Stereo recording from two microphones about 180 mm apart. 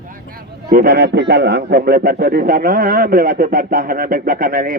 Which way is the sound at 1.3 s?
65° right (ahead or behind).